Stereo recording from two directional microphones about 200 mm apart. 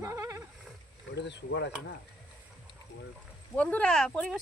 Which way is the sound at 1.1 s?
60° left (ahead or behind).